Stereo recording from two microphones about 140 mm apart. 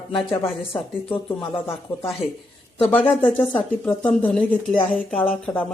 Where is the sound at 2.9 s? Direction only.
10° left (ahead or behind).